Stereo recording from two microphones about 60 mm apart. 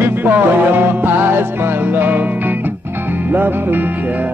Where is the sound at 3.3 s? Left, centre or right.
Right.